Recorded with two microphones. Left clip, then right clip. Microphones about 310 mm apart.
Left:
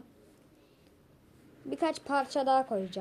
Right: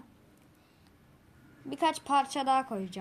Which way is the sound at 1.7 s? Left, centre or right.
Centre.